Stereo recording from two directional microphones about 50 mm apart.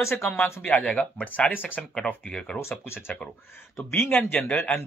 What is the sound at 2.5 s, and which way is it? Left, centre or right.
Speech, left.